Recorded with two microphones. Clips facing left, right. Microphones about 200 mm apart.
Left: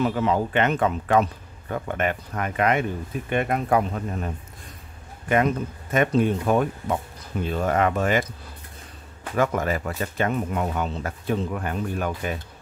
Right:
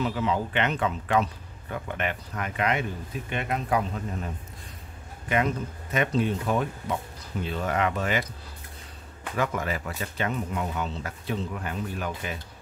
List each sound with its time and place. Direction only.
0.0 s speech: 50° left (ahead or behind)
5.3 s speech: 50° left (ahead or behind)
9.4 s speech: 45° left (ahead or behind)